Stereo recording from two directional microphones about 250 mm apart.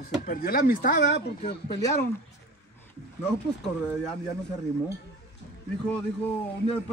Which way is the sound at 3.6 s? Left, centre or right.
Centre.